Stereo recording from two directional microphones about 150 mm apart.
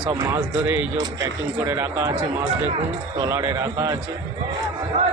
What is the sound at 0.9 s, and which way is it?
Speech, 20° right (ahead or behind).